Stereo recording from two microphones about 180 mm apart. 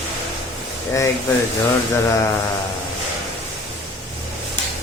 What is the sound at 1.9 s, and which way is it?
Speech, 15° left (ahead or behind).